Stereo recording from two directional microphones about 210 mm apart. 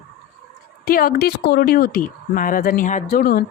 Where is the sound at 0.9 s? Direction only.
45° left (ahead or behind).